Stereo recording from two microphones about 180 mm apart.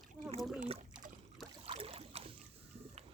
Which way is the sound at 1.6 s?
30° right (ahead or behind).